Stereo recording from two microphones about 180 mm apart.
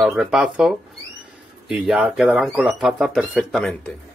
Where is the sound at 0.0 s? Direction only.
Centre (ahead or behind).